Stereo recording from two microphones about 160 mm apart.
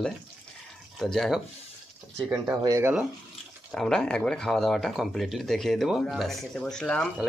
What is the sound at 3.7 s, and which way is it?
Speech, 5° left (ahead or behind).